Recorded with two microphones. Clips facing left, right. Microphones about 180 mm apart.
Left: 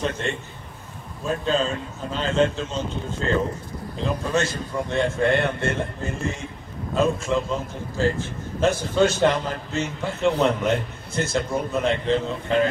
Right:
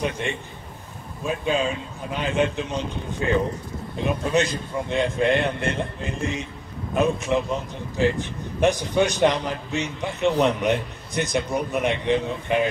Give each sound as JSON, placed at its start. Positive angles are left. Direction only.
{"t": 0.2, "sound": "a man's voice", "side_deg": -15}